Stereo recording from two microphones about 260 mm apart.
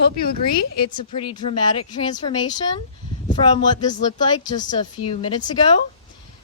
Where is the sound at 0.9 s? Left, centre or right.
Left.